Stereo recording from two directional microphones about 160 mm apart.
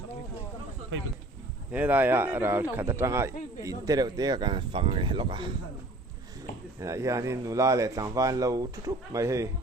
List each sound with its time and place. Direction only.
1.7 s speech: 10° right (ahead or behind); by 5.5 s 30° right (ahead or behind)
6.7 s speech: 20° right (ahead or behind)